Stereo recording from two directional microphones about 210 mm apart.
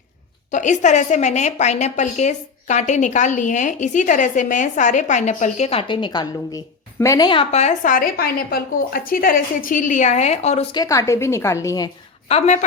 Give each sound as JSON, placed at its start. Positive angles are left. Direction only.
{"t": 0.5, "sound": "a woman's voice", "side_deg": 35}